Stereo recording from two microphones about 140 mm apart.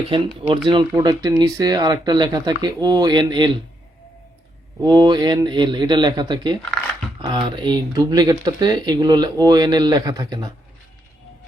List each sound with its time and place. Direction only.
0.1 s speech: 40° right (ahead or behind)
4.8 s speech: 25° right (ahead or behind)